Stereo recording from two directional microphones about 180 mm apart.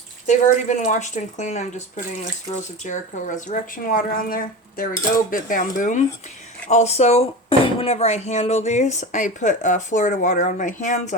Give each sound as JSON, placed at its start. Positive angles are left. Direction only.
{"t": 0.3, "sound": "speech", "side_deg": 40}